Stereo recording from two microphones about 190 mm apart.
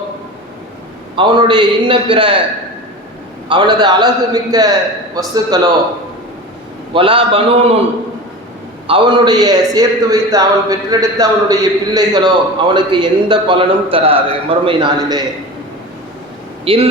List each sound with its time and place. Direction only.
1.1 s a man's voice: 25° right (ahead or behind)
3.5 s a man's voice: 20° right (ahead or behind)
6.9 s a man's voice: 25° right (ahead or behind)
8.9 s a man's voice: 25° right (ahead or behind)
16.6 s a man's voice: 30° right (ahead or behind)